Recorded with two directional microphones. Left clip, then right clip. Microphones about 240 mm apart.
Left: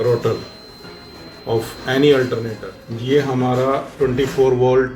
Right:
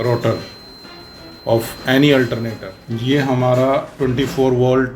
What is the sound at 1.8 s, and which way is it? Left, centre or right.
Speech, right.